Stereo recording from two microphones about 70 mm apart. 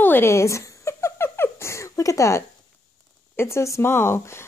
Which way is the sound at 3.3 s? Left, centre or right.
Left.